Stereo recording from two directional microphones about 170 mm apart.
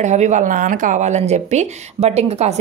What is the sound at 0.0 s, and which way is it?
Speech, 45° right (ahead or behind).